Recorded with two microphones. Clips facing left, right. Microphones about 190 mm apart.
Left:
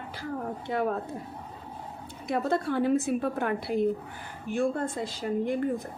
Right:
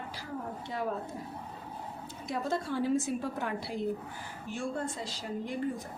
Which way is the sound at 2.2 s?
60° left (ahead or behind).